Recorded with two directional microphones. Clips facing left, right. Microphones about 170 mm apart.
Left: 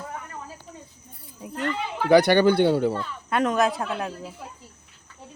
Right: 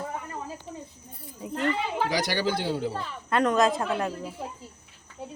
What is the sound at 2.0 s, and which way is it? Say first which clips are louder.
Speech: left 15 dB; 60° left (ahead or behind).